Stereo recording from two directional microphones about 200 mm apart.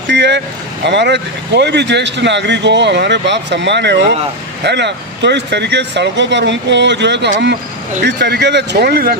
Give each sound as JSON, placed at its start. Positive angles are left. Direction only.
{"t": 0.1, "sound": "vehicle", "side_deg": -60}
{"t": 0.9, "sound": "speech", "side_deg": -60}